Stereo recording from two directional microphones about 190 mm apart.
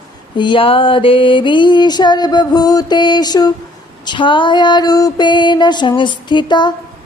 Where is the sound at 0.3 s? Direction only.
25° left (ahead or behind).